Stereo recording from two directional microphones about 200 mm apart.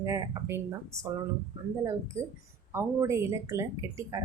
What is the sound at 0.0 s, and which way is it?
Speech, 15° right (ahead or behind).